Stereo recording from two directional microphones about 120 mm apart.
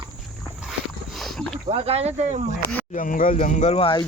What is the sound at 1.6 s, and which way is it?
Speech, 55° right (ahead or behind).